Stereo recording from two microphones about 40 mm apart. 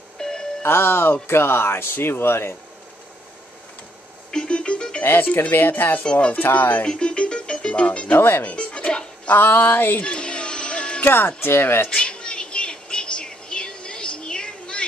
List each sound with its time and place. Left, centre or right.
0.2 s music: centre
0.6 s speech: left
4.3 s music: left
5.0 s speech: left
6.1 s speech: left
6.4 s speech: left
6.8 s music: left
8.2 s speech: left
8.5 s music: left
9.3 s speech: left
10.0 s a sound: left
11.1 s speech: left
11.9 s a sound: centre